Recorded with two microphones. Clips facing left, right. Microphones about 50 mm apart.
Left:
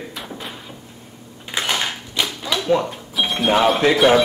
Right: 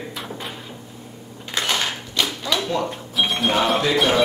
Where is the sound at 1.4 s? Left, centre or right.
Centre.